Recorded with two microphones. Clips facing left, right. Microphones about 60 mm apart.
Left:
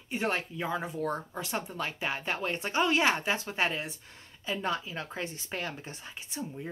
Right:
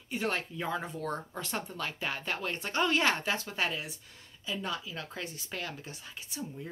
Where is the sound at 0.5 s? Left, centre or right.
Centre.